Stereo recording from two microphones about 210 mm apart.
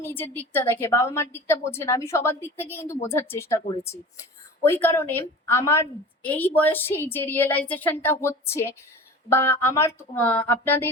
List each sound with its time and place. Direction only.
0.0 s a woman's voice: 10° left (ahead or behind)